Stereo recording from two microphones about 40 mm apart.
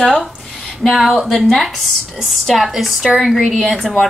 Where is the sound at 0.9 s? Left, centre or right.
Centre.